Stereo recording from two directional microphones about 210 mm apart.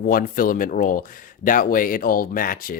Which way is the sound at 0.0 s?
40° left (ahead or behind).